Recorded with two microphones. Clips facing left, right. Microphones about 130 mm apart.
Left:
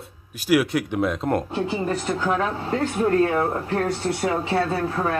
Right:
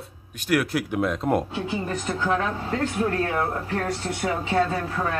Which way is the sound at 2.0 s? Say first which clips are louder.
Left 1 dB; 10° left (ahead or behind).